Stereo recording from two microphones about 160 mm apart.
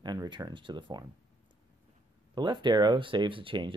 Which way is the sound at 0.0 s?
25° right (ahead or behind).